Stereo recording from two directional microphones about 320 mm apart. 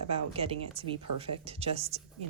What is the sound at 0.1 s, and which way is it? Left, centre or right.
Speech, centre.